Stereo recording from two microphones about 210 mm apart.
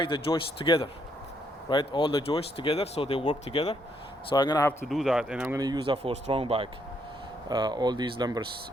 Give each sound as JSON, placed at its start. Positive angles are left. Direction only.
{"t": 0.0, "sound": "speech", "side_deg": 25}
{"t": 4.9, "sound": "speech", "side_deg": 0}
{"t": 5.5, "sound": "speech", "side_deg": -20}